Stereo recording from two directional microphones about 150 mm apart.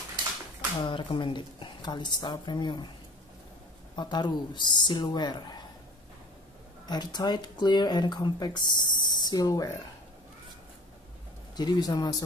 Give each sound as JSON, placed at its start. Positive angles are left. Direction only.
{"t": 0.8, "sound": "speech", "side_deg": 35}
{"t": 3.9, "sound": "speech", "side_deg": 30}
{"t": 6.9, "sound": "speech", "side_deg": 30}
{"t": 11.5, "sound": "speech", "side_deg": 30}